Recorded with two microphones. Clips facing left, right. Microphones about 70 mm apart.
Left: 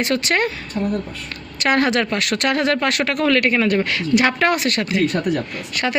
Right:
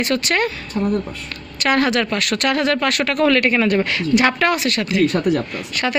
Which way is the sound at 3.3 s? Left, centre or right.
Centre.